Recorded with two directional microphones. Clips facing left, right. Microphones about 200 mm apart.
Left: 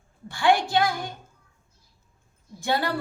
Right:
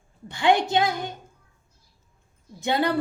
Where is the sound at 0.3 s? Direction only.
20° right (ahead or behind).